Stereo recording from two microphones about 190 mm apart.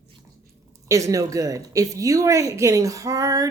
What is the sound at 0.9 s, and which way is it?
A woman's voice, 15° right (ahead or behind).